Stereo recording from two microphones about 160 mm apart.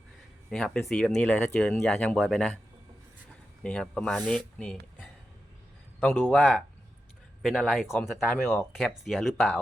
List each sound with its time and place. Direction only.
0.5 s speech: 5° left (ahead or behind)
3.6 s speech: 5° left (ahead or behind)
7.4 s speech: centre (ahead or behind)